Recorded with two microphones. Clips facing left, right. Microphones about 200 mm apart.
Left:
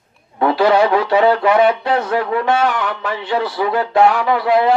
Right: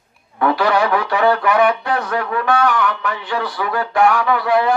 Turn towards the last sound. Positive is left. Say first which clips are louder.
# left 2 dB
turn(degrees=20)  # may be behind; listen again after turning